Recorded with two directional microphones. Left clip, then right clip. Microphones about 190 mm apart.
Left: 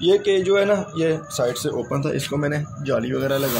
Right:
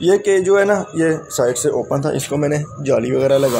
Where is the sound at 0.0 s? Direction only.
25° right (ahead or behind).